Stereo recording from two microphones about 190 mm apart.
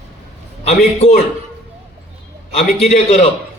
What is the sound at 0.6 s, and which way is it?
Speech, 35° left (ahead or behind).